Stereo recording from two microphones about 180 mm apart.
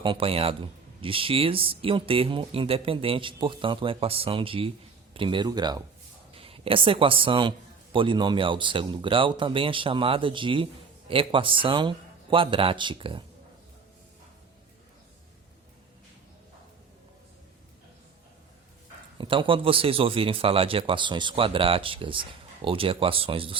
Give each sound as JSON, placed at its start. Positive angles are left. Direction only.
{"t": 0.0, "sound": "speech", "side_deg": -30}
{"t": 19.2, "sound": "speech", "side_deg": -30}